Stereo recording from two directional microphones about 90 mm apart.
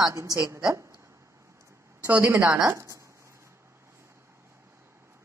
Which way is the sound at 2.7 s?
35° right (ahead or behind).